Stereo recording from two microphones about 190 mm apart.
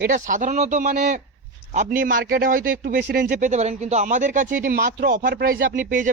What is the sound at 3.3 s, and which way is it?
Speech, 40° right (ahead or behind).